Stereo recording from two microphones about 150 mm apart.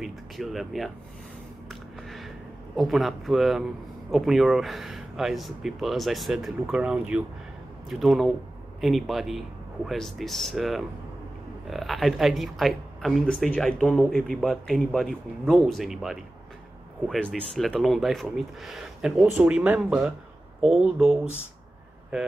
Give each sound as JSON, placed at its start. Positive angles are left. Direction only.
{"t": 0.0, "sound": "speech", "side_deg": 0}